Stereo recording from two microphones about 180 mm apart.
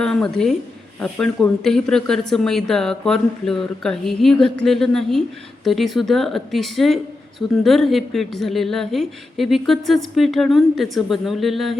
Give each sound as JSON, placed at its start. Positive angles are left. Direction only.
{"t": 0.0, "sound": "a woman's voice", "side_deg": 5}